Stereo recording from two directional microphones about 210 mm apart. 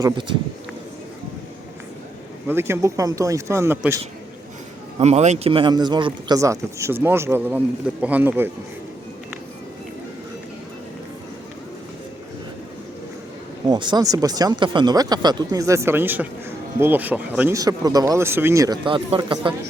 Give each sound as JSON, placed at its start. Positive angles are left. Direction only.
{"t": 0.0, "sound": "a man's voice", "side_deg": -20}
{"t": 2.5, "sound": "speech", "side_deg": -10}
{"t": 4.9, "sound": "a man's voice", "side_deg": -30}
{"t": 13.7, "sound": "speech", "side_deg": -20}